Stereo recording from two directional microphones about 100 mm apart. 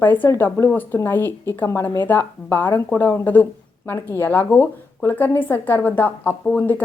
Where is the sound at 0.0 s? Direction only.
20° left (ahead or behind).